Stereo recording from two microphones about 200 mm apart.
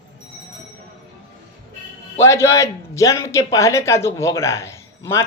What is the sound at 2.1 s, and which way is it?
A man's voice, 15° left (ahead or behind).